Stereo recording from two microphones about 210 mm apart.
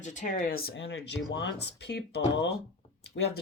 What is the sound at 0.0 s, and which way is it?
Speech, 35° left (ahead or behind).